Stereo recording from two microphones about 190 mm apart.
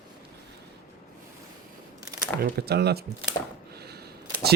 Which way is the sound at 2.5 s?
60° right (ahead or behind).